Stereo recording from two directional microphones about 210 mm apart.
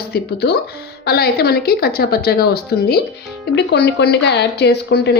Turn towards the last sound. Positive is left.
turn(degrees=55)  # may be behind; listen again after turning